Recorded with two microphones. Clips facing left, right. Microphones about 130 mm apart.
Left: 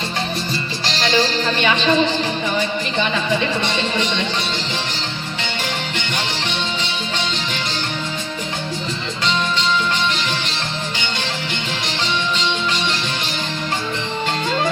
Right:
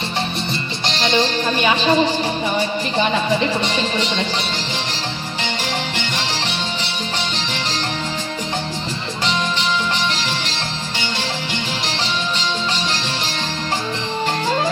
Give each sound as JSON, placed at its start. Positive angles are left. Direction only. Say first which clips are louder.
{"t": 1.0, "sound": "music", "louder": "even", "side_deg": -20}
{"t": 1.6, "sound": "music", "louder": "right 1 dB", "side_deg": -35}